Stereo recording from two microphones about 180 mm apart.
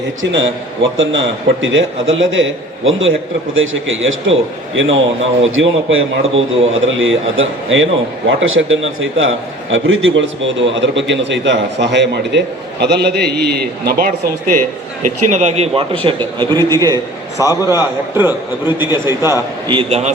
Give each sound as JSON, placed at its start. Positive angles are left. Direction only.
{"t": 0.2, "sound": "a man's voice", "side_deg": -90}
{"t": 17.3, "sound": "a man's voice", "side_deg": 20}
{"t": 18.8, "sound": "a man's voice", "side_deg": -15}
{"t": 19.7, "sound": "a man's voice", "side_deg": -30}